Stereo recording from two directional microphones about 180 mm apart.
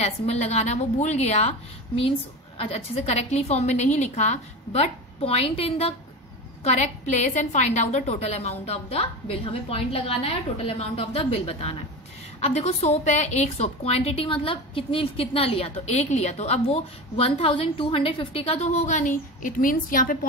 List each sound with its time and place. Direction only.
0.0 s a woman's voice: 35° left (ahead or behind)